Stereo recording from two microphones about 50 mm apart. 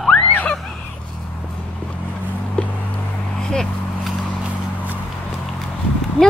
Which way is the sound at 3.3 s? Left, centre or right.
Centre.